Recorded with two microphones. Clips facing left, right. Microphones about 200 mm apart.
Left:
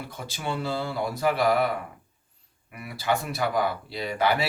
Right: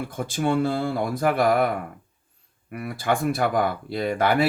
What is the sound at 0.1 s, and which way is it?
Speech, 50° right (ahead or behind).